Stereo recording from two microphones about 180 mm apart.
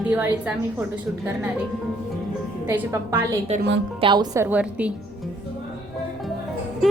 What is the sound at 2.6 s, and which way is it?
A woman's voice, 15° right (ahead or behind).